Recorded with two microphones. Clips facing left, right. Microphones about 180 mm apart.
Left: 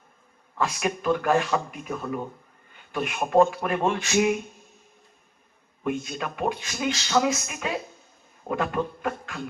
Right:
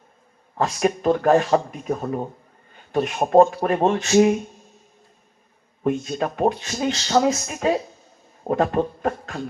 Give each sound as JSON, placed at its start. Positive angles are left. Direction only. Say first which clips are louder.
{"t": 0.5, "sound": "speech", "louder": "right 6 dB", "side_deg": -40}
{"t": 5.8, "sound": "speech", "louder": "right 6 dB", "side_deg": -40}